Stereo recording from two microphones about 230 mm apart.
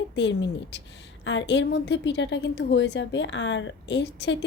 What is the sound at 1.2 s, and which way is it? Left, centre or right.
Speech, left.